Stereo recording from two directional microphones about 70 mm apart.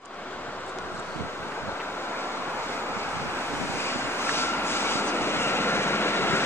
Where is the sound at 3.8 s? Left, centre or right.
Left.